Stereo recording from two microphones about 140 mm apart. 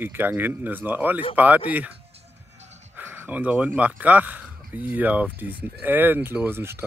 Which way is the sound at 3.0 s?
10° right (ahead or behind).